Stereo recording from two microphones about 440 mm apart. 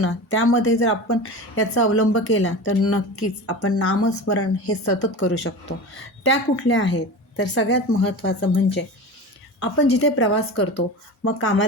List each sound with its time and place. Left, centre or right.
0.0 s a woman's voice: left